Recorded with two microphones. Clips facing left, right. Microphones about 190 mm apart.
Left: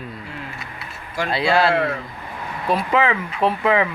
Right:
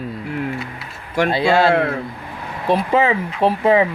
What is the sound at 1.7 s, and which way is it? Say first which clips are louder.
Speech: right 3 dB; 55° right (ahead or behind).